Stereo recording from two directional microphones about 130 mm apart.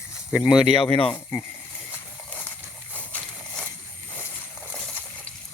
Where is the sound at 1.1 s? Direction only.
15° left (ahead or behind).